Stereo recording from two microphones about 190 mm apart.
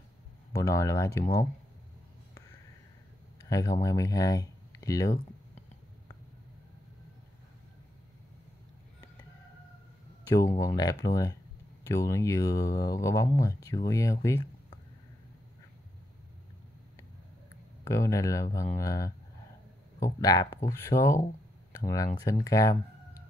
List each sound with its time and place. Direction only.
0.5 s speech: 15° left (ahead or behind)
3.4 s speech: 20° left (ahead or behind)
10.7 s speech: 20° left (ahead or behind)
17.8 s speech: 15° left (ahead or behind)